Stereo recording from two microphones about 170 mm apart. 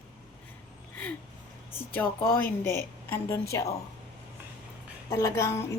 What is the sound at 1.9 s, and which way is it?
A woman's voice, 10° left (ahead or behind).